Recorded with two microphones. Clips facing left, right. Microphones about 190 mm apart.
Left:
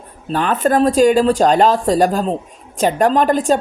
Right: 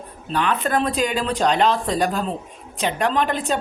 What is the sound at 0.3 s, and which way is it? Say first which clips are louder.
A woman's voice: left 6 dB; 45° left (ahead or behind).